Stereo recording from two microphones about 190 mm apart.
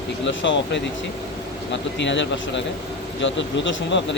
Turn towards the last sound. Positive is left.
turn(degrees=70)  # may be behind; listen again after turning